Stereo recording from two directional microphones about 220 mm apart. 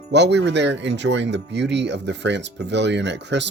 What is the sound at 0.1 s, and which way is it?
Speech, 50° right (ahead or behind).